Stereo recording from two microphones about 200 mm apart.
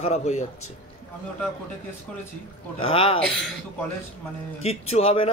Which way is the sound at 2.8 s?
25° left (ahead or behind).